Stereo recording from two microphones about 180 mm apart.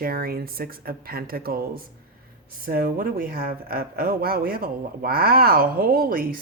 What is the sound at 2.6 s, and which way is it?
Speech, 55° right (ahead or behind).